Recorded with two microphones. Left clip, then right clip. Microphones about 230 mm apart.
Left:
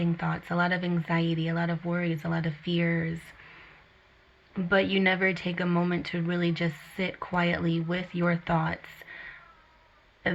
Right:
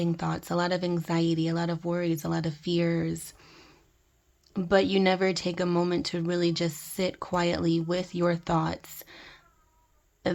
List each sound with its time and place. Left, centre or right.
0.0 s speech: right
4.5 s speech: right